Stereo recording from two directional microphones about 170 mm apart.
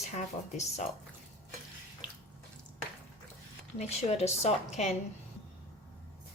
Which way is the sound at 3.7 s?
40° left (ahead or behind).